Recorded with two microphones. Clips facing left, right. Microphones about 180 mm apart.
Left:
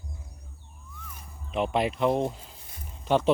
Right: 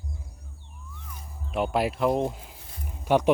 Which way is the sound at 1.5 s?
5° right (ahead or behind).